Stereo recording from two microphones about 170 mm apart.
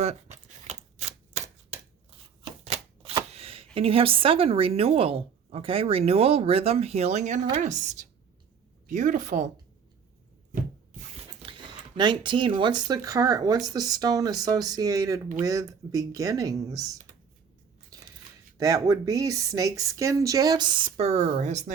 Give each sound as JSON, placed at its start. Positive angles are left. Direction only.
{"t": 0.0, "sound": "typewriter", "side_deg": -40}
{"t": 2.6, "sound": "shuffling cards", "side_deg": -35}
{"t": 3.8, "sound": "a woman's voice", "side_deg": -35}
{"t": 11.4, "sound": "speech", "side_deg": -25}
{"t": 17.9, "sound": "a sound", "side_deg": -20}
{"t": 18.5, "sound": "speech", "side_deg": -20}
{"t": 20.9, "sound": "speech", "side_deg": -40}